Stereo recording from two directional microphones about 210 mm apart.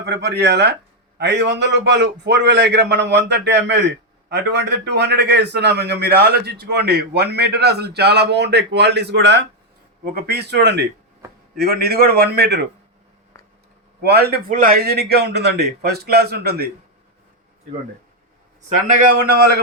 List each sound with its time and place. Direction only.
0.0 s a man's voice: 55° right (ahead or behind)
14.0 s a man's voice: 50° right (ahead or behind)